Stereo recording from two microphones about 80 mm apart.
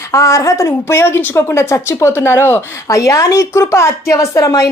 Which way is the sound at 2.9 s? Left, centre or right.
Left.